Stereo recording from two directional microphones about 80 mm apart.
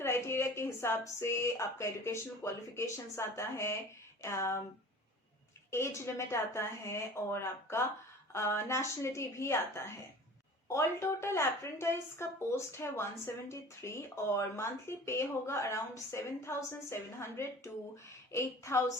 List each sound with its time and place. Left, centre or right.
0.0 s a woman's voice: left
5.7 s a woman's voice: left